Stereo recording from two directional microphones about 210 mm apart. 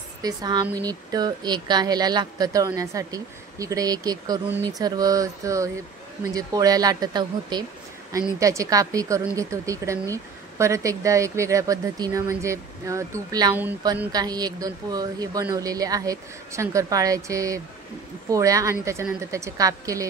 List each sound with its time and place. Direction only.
0.2 s a woman's voice: 20° right (ahead or behind)